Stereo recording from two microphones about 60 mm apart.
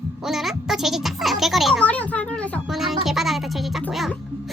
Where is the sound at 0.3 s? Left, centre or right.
Centre.